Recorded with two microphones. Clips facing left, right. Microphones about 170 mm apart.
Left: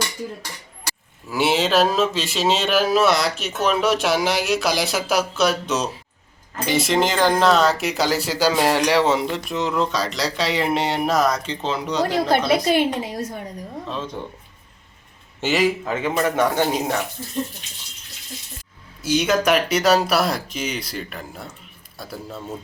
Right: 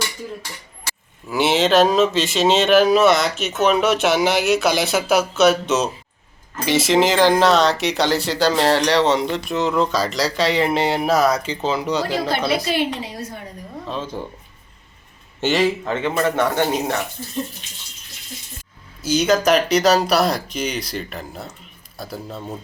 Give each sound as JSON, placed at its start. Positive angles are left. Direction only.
{"t": 1.3, "sound": "speech", "side_deg": 0}
{"t": 12.6, "sound": "a woman's voice", "side_deg": 50}
{"t": 13.8, "sound": "speech", "side_deg": 0}
{"t": 15.4, "sound": "a man's voice", "side_deg": 0}
{"t": 19.0, "sound": "speech", "side_deg": 0}